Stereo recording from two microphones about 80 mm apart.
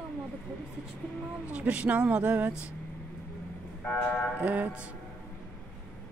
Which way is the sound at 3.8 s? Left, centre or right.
Centre.